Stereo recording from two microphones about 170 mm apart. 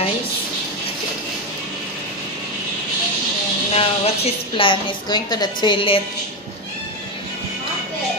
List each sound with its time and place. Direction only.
3.7 s a woman's voice: 35° left (ahead or behind)